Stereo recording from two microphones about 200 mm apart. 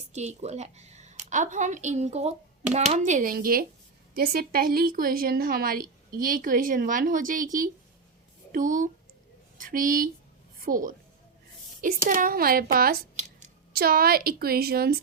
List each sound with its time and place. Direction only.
0.1 s a woman's voice: 35° right (ahead or behind)
12.0 s a woman's voice: 45° right (ahead or behind)